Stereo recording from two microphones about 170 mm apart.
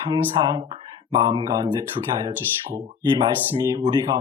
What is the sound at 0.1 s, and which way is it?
A man's voice, 25° right (ahead or behind).